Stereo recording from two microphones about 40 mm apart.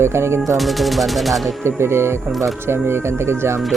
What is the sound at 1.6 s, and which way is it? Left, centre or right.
Speech, right.